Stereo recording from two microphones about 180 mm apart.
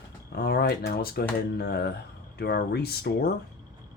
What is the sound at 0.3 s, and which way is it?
Speech, 65° left (ahead or behind).